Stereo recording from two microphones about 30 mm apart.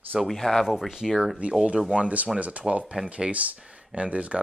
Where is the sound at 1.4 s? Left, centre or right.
Right.